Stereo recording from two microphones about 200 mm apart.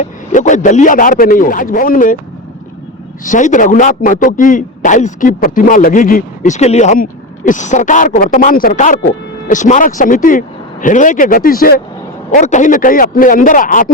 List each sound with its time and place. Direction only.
0.0 s a man's voice: 40° left (ahead or behind)
3.2 s a man's voice: 40° left (ahead or behind)